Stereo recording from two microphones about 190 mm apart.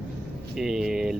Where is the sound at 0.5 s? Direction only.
Centre (ahead or behind).